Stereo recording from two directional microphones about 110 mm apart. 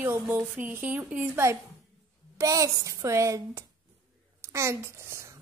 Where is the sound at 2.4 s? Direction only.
30° right (ahead or behind).